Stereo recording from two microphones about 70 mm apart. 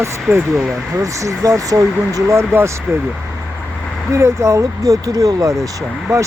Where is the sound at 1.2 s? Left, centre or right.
Right.